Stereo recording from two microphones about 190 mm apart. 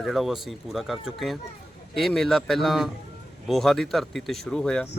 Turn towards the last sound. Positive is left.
turn(degrees=5)  # may be behind; listen again after turning